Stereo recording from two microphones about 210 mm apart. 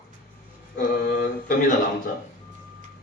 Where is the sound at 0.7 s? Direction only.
40° left (ahead or behind).